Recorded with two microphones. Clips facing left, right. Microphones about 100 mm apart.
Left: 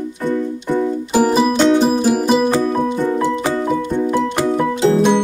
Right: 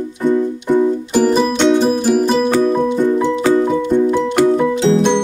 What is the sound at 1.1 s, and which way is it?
Music, 10° left (ahead or behind).